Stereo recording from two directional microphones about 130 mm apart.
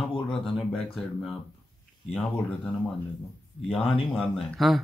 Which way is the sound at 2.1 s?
5° left (ahead or behind).